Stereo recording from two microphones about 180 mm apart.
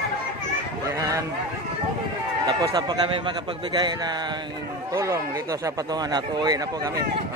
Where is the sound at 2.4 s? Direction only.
25° right (ahead or behind).